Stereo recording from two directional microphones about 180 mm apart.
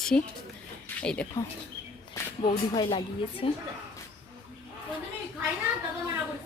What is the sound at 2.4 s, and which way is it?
Speech, 25° left (ahead or behind).